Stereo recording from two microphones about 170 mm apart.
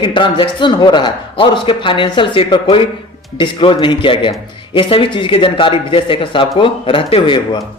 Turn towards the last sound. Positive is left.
turn(degrees=30)  # may be behind; listen again after turning